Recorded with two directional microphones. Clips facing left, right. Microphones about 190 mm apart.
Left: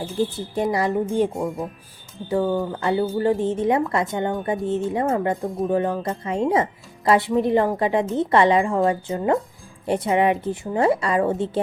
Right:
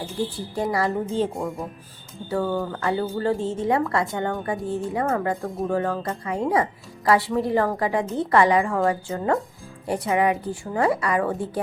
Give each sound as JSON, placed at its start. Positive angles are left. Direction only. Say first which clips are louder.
{"t": 0.2, "sound": "speech", "louder": "left 4 dB", "side_deg": 20}
{"t": 2.3, "sound": "speech", "louder": "left 3 dB", "side_deg": 20}